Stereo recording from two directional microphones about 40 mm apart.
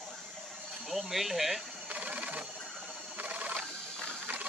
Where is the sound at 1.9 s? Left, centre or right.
Right.